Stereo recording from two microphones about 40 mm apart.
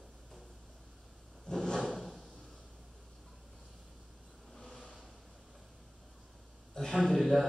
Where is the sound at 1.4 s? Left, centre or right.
Centre.